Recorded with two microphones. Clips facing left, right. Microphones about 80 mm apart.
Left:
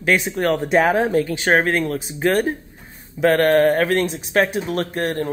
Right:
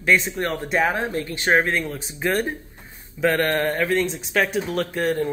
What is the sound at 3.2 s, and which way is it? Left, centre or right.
Speech, left.